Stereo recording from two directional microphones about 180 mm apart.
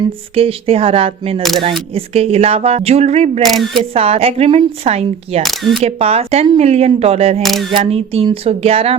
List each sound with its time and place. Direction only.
0.3 s speech: 30° right (ahead or behind)
1.4 s speech: centre (ahead or behind)
1.9 s speech: 35° right (ahead or behind)
3.4 s speech: centre (ahead or behind)
3.9 s speech: 35° right (ahead or behind)
5.4 s speech: centre (ahead or behind)
5.8 s speech: 35° right (ahead or behind)
7.4 s speech: centre (ahead or behind)
7.7 s speech: 35° right (ahead or behind)